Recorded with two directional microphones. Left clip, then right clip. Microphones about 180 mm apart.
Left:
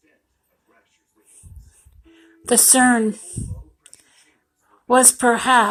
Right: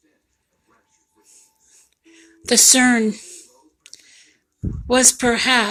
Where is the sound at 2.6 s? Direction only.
30° right (ahead or behind).